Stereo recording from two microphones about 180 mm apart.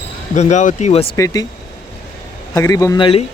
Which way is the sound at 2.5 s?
20° left (ahead or behind).